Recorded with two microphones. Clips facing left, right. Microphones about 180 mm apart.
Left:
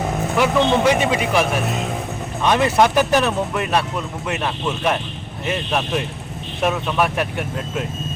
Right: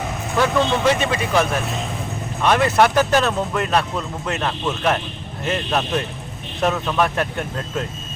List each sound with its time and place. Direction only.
0.3 s speech: 15° left (ahead or behind)